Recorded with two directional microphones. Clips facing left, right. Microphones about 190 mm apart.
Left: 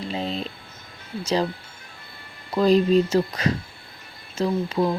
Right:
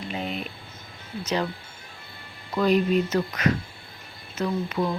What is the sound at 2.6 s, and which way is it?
Speech, 35° left (ahead or behind).